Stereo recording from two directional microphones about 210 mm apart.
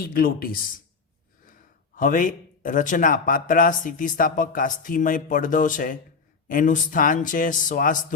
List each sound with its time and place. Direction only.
0.0 s speech: 45° left (ahead or behind)
2.0 s speech: 40° left (ahead or behind)